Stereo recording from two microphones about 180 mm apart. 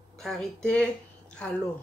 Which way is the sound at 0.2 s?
Centre (ahead or behind).